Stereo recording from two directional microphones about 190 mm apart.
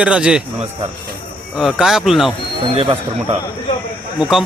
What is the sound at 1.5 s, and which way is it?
Speech, centre (ahead or behind).